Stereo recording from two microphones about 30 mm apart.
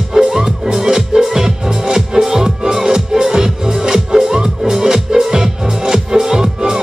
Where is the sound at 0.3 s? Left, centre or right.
Centre.